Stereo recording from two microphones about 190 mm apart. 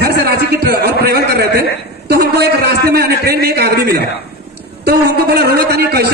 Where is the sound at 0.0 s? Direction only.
55° right (ahead or behind).